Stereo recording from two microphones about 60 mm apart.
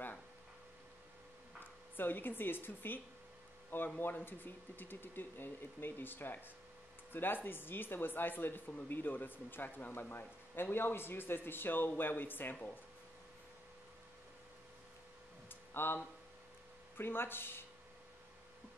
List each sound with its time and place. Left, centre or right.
1.6 s speech: left
4.0 s speech: left
15.4 s a sound: left
16.9 s speech: left